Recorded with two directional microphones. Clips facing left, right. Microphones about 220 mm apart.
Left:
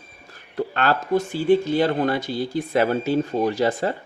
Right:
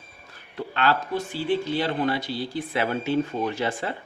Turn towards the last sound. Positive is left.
turn(degrees=40)  # may be behind; listen again after turning